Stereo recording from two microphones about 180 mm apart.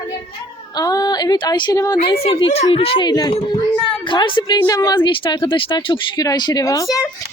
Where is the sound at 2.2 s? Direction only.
30° left (ahead or behind).